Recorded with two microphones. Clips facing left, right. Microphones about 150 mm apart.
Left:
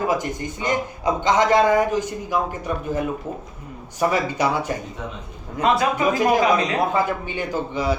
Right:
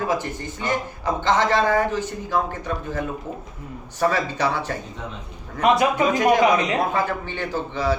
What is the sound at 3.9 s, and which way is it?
Speech, 10° left (ahead or behind).